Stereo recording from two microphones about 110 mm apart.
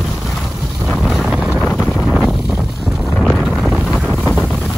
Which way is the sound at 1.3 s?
Centre (ahead or behind).